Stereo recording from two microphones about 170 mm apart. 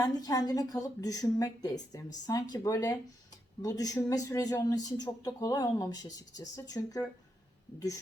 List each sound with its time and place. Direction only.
0.0 s a man's voice: 20° left (ahead or behind)